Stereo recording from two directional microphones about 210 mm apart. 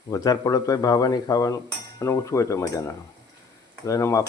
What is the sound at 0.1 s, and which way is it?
Cutlery, 15° left (ahead or behind).